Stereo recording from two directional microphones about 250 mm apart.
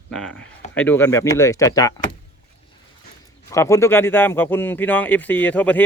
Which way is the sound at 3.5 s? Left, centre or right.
Centre.